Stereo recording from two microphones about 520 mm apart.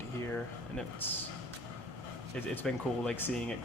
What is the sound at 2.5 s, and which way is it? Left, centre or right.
Speech, centre.